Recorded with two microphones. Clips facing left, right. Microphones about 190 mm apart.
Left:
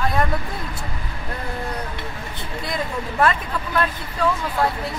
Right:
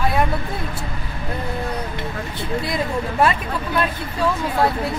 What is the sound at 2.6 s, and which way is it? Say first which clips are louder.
Speech: even; 15° right (ahead or behind).